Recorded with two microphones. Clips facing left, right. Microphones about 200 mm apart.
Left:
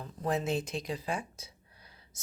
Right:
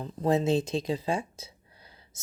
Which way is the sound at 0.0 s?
25° right (ahead or behind).